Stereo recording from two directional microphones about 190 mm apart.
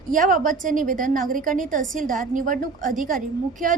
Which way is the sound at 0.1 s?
45° right (ahead or behind).